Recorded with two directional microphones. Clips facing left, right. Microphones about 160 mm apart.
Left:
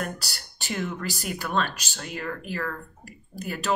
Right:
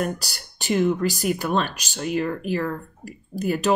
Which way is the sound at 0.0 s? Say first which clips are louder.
Right 6 dB; 15° right (ahead or behind).